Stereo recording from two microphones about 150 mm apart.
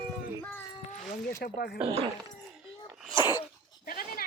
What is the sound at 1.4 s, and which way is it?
Speech, 90° left.